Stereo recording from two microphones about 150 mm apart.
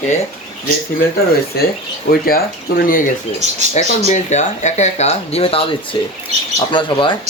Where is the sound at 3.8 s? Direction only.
50° left (ahead or behind).